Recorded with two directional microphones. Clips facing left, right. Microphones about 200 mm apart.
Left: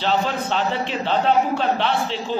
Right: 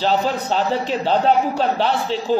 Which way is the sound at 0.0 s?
40° right (ahead or behind).